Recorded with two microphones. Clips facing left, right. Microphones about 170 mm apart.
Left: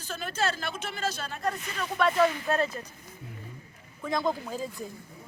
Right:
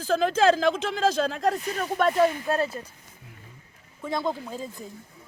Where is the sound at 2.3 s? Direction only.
30° right (ahead or behind).